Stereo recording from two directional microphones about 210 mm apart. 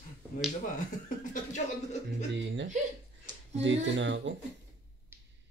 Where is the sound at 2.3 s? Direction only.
60° right (ahead or behind).